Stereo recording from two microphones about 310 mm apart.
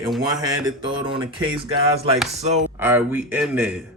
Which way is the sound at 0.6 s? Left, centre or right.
Centre.